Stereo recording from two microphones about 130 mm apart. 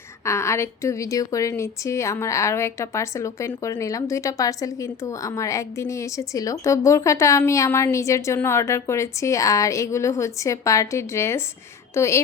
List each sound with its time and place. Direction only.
0.3 s a woman's voice: 20° left (ahead or behind)